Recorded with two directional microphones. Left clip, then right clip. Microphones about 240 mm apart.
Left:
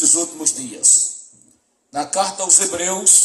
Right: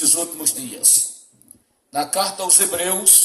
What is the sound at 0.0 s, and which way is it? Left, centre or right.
Speech, right.